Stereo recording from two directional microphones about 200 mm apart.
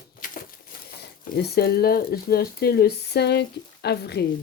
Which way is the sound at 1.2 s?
50° left (ahead or behind).